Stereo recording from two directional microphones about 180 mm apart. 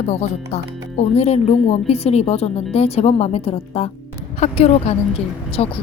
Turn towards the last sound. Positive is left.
turn(degrees=35)  # may be behind; listen again after turning